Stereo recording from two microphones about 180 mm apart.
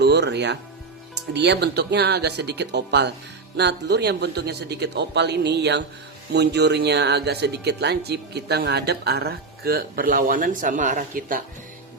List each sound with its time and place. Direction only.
0.0 s speech: 70° right (ahead or behind); by 11.4 s 50° right (ahead or behind)